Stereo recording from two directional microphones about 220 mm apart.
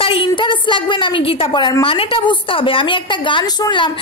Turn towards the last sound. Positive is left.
turn(degrees=20)  # may be behind; listen again after turning